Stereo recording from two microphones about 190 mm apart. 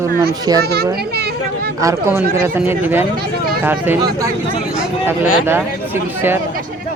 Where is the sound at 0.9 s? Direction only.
55° right (ahead or behind).